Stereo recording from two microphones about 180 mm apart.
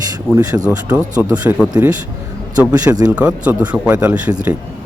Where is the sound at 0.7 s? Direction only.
5° right (ahead or behind).